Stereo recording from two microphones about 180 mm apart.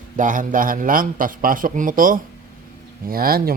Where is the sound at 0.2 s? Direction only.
45° right (ahead or behind).